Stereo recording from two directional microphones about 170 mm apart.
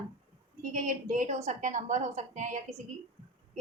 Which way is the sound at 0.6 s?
50° right (ahead or behind).